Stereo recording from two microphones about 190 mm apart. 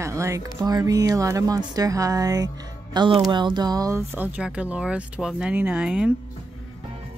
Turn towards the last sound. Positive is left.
turn(degrees=-5)  # may be behind; listen again after turning